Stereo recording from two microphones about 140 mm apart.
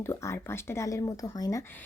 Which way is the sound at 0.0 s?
20° left (ahead or behind).